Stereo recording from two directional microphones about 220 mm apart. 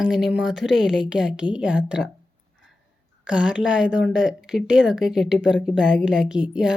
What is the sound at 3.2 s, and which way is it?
A woman's voice, 5° right (ahead or behind).